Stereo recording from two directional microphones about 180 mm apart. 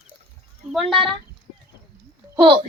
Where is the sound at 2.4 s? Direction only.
30° right (ahead or behind).